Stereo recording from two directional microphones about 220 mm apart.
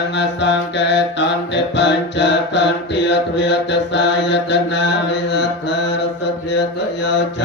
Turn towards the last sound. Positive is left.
turn(degrees=50)  # may be behind; listen again after turning